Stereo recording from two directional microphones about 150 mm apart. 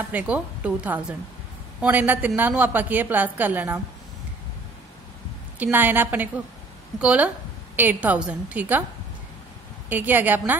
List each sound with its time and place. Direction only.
0.1 s a woman's voice: 10° right (ahead or behind)
5.6 s a woman's voice: 10° right (ahead or behind)
9.8 s a woman's voice: 10° right (ahead or behind)